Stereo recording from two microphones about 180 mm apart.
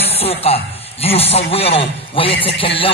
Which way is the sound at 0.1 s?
35° left (ahead or behind).